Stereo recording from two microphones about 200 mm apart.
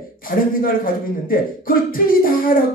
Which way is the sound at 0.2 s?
45° left (ahead or behind).